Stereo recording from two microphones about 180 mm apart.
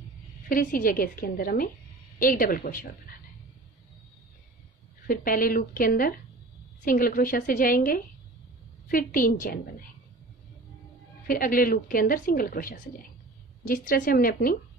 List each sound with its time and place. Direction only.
0.5 s a woman's voice: 50° left (ahead or behind)
5.0 s a woman's voice: 50° left (ahead or behind)
11.2 s a woman's voice: 50° left (ahead or behind)